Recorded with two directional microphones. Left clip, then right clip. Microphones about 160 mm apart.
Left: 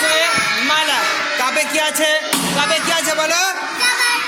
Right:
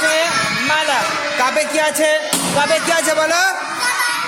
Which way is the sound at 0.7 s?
30° right (ahead or behind).